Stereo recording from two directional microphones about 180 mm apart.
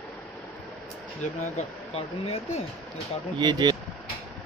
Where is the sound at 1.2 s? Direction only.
35° left (ahead or behind).